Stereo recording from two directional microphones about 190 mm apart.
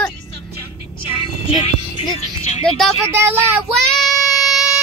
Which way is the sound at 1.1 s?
30° left (ahead or behind).